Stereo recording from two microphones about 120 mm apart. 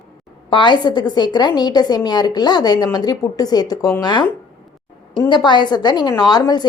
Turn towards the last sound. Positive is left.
turn(degrees=35)  # may be behind; listen again after turning